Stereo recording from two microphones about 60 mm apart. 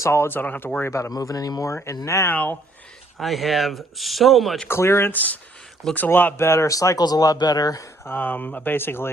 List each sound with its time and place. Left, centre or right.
0.0 s speech: left
1.1 s speech: left
1.7 s speech: left
2.3 s speech: left
3.2 s speech: centre
4.7 s speech: left
5.1 s speech: left
6.7 s speech: left
8.0 s speech: left
8.7 s speech: left